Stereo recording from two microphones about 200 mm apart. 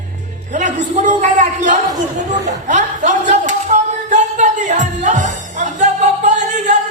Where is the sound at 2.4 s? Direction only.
35° right (ahead or behind).